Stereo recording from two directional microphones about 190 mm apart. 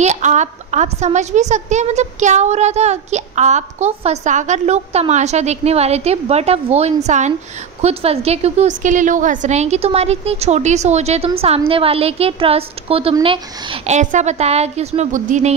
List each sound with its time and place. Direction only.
0.0 s a woman's voice: 40° right (ahead or behind)